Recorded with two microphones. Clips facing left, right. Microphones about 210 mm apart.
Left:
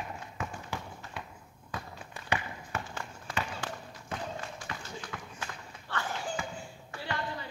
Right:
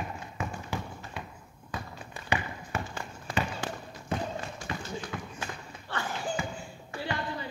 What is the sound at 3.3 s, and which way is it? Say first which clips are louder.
Basketball bounce: right 5 dB; 20° right (ahead or behind).